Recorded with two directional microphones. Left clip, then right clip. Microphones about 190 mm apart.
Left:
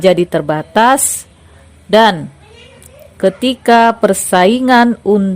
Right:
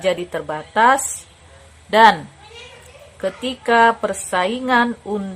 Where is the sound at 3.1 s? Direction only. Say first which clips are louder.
Left 11 dB; 40° left (ahead or behind).